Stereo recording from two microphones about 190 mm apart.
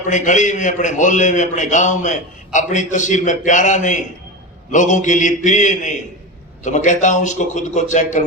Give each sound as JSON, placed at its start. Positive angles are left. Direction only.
{"t": 0.0, "sound": "a man's voice", "side_deg": 40}